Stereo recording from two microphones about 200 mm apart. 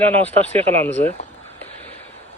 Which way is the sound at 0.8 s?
10° left (ahead or behind).